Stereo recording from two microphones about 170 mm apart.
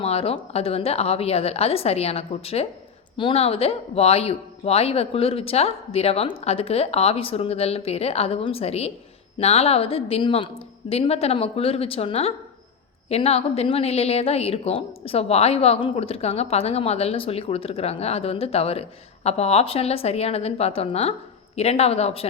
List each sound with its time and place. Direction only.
0.0 s a woman's voice: 35° left (ahead or behind)